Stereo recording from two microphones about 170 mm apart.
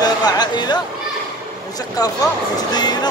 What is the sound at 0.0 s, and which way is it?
Speech, 25° left (ahead or behind).